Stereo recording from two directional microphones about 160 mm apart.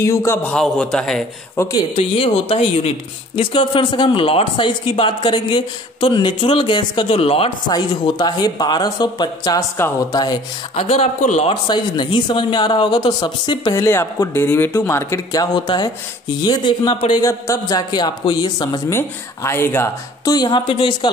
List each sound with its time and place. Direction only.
0.0 s speech: 20° left (ahead or behind)
1.6 s speech: 25° left (ahead or behind)
2.0 s speech: 40° left (ahead or behind)
10.9 s speech: 45° left (ahead or behind)
11.6 s speech: 30° left (ahead or behind)
13.8 s speech: 15° left (ahead or behind); by 17.2 s 30° left (ahead or behind)
17.2 s speech: 20° left (ahead or behind)
18.9 s speech: 15° left (ahead or behind); by 21.1 s 30° left (ahead or behind)